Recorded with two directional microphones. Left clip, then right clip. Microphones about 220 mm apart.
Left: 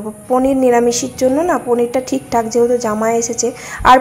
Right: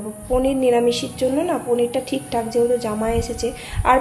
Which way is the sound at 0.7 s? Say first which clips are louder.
Left 5 dB; 10° left (ahead or behind).